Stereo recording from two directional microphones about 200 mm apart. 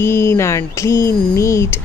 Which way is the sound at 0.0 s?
10° left (ahead or behind).